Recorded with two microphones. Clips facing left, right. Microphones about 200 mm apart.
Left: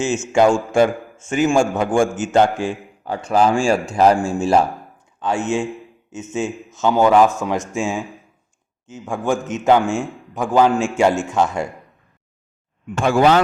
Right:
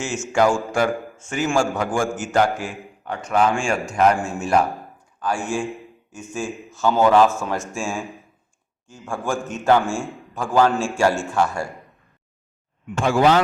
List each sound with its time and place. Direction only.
0.3 s a man's voice: 25° left (ahead or behind)
13.0 s speech: 55° left (ahead or behind)